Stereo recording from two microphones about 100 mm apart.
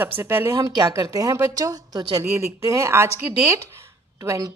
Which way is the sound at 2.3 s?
30° right (ahead or behind).